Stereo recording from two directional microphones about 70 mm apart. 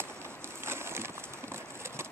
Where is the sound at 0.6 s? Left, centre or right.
Right.